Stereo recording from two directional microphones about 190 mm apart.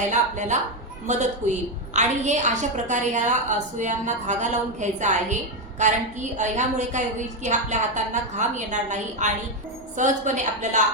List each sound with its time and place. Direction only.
0.1 s a woman's voice: 40° right (ahead or behind)